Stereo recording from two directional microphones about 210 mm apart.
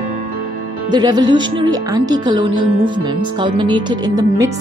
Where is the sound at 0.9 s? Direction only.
20° right (ahead or behind).